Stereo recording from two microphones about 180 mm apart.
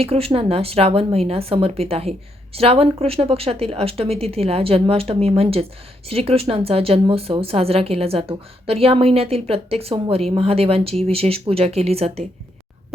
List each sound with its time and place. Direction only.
0.0 s speech: 35° right (ahead or behind)